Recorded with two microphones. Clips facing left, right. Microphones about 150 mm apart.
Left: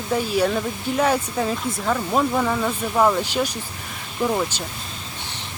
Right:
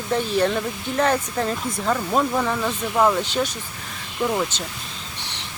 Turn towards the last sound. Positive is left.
turn(degrees=10)  # may be behind; listen again after turning